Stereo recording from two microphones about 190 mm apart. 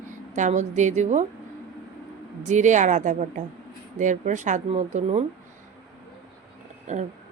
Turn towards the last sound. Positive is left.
turn(degrees=-40)  # may be behind; listen again after turning